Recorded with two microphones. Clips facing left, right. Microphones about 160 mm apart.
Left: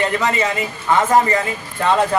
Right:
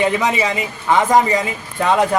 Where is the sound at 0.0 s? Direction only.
15° right (ahead or behind).